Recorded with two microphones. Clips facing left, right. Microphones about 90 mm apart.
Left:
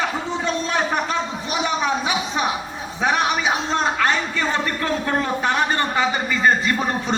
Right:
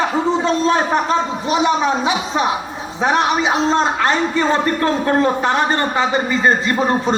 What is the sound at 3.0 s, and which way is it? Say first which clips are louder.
A man's voice: right 4 dB; 30° right (ahead or behind).